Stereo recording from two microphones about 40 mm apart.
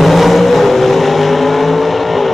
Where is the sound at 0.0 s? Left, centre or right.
Centre.